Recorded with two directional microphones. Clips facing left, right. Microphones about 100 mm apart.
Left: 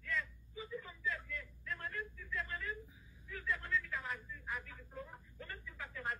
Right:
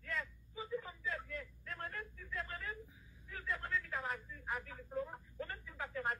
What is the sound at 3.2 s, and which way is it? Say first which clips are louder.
Speech: left 1 dB; 40° right (ahead or behind).